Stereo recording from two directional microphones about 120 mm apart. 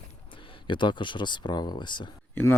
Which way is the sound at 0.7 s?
40° left (ahead or behind).